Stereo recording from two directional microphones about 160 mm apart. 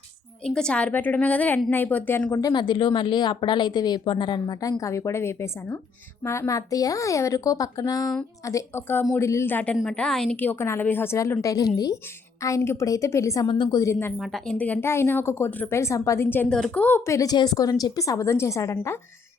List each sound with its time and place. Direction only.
0.4 s a woman's voice: 5° left (ahead or behind)
2.5 s a woman's voice: 30° left (ahead or behind)
14.2 s a woman's voice: centre (ahead or behind); by 18.9 s 20° left (ahead or behind)